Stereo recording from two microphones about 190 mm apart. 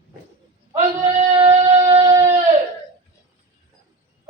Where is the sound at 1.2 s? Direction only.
30° right (ahead or behind).